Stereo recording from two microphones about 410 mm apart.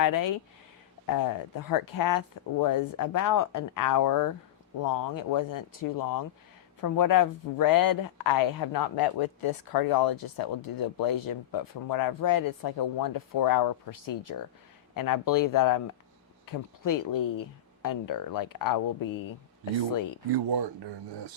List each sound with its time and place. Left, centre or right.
0.0 s speech: left
1.6 s speech: left
20.3 s speech: right